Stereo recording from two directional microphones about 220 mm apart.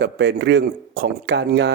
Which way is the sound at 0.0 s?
50° right (ahead or behind).